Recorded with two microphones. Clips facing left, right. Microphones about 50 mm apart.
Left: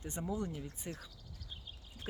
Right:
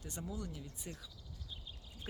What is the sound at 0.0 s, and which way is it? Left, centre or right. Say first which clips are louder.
Speech: left 6 dB; left.